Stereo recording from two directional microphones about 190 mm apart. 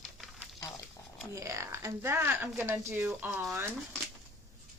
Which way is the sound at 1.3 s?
15° right (ahead or behind).